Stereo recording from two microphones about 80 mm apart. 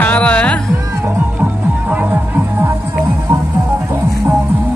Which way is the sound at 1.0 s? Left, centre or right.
Centre.